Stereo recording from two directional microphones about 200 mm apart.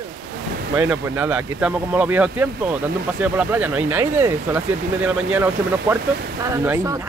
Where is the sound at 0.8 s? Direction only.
10° right (ahead or behind).